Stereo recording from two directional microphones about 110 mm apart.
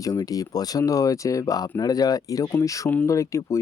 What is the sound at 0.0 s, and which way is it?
Speech, 35° left (ahead or behind).